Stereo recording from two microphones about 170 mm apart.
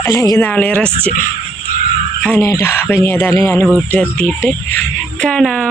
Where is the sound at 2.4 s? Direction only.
15° left (ahead or behind).